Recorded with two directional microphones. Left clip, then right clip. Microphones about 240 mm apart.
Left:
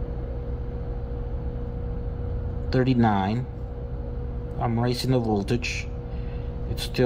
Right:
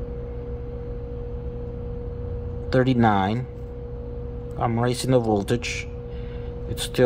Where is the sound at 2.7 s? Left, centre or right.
Centre.